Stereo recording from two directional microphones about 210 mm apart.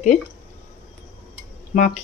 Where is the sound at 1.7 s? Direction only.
35° left (ahead or behind).